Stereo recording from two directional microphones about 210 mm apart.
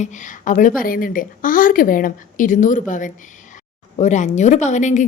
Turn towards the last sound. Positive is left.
turn(degrees=35)  # may be behind; listen again after turning